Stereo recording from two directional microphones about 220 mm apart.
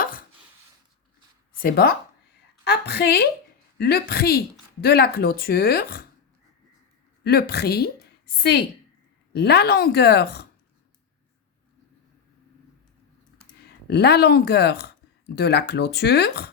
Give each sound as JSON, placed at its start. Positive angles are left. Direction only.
{"t": 1.5, "sound": "speech", "side_deg": 45}
{"t": 7.3, "sound": "speech", "side_deg": 45}
{"t": 9.3, "sound": "speech", "side_deg": 50}
{"t": 13.4, "sound": "speech", "side_deg": 45}